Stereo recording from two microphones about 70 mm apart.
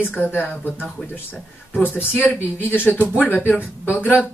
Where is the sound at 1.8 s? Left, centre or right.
Left.